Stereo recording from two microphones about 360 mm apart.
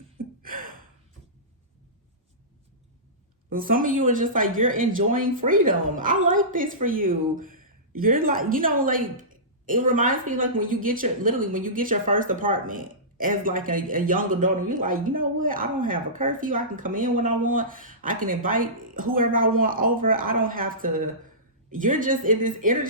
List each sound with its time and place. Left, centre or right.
0.4 s gasp: right
3.5 s speech: right